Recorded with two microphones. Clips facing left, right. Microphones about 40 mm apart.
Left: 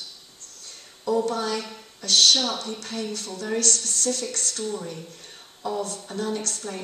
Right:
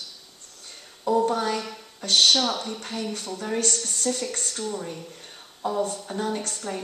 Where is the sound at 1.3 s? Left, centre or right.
Right.